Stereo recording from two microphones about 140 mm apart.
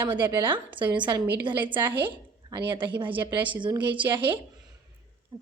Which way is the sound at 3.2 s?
35° right (ahead or behind).